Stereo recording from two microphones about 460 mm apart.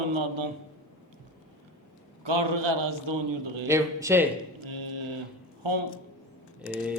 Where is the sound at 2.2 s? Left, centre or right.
Right.